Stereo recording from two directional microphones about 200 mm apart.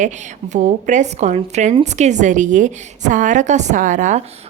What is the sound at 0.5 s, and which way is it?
A woman's voice, 35° right (ahead or behind).